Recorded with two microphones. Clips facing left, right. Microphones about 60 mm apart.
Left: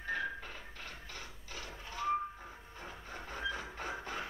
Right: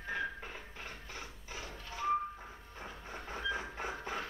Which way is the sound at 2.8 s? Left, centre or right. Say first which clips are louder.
Right 1 dB; centre.